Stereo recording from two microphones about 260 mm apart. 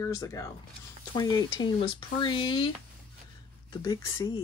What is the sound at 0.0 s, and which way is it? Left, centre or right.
Speech, centre.